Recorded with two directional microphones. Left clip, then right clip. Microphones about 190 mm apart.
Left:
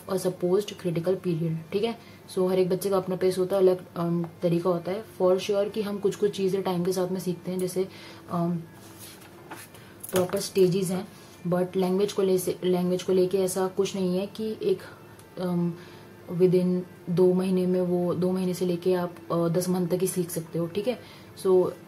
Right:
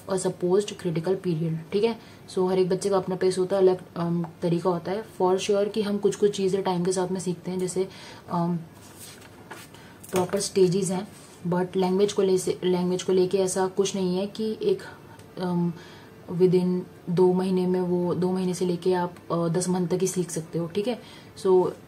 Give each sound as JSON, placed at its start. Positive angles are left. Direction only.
{"t": 0.1, "sound": "a woman's voice", "side_deg": -10}
{"t": 10.3, "sound": "a woman's voice", "side_deg": -15}
{"t": 16.3, "sound": "a woman's voice", "side_deg": -10}